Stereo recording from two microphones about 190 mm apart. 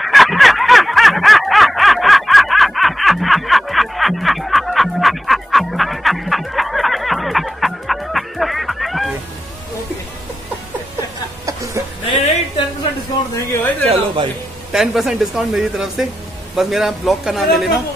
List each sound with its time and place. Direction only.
0.0 s snicker: centre (ahead or behind)
11.4 s music: 15° right (ahead or behind)
13.4 s speech: 15° left (ahead or behind)
13.8 s speech: 25° right (ahead or behind)
14.7 s a man's voice: centre (ahead or behind)